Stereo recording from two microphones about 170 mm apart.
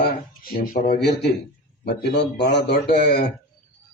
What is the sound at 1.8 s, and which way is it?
Speech, 80° left.